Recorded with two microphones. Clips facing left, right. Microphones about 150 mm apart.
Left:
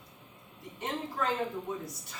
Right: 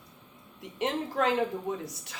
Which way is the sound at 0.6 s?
85° right.